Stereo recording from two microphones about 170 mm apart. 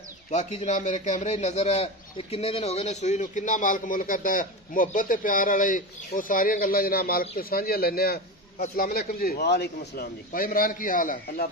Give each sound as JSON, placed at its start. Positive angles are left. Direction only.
{"t": 0.3, "sound": "a man's voice", "side_deg": 45}